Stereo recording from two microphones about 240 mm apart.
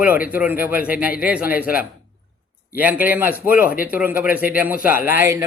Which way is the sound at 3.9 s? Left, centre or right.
Centre.